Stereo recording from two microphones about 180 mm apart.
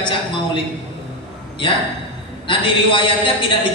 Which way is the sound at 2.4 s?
30° left (ahead or behind).